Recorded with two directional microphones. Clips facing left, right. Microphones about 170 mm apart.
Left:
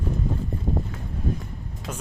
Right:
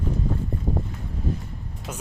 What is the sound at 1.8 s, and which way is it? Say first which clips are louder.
Speech: left 1 dB; 90° left.